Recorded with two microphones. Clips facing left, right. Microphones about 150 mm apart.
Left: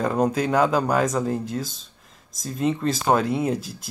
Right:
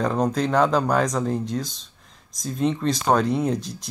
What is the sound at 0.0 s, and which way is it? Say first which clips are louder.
Speech: even; 5° left (ahead or behind).